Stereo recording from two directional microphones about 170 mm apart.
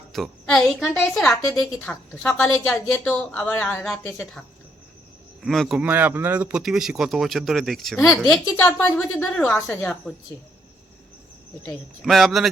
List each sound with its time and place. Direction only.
0.1 s a woman's voice: centre (ahead or behind)
2.7 s a woman's voice: 15° left (ahead or behind)
12.0 s a woman's voice: centre (ahead or behind)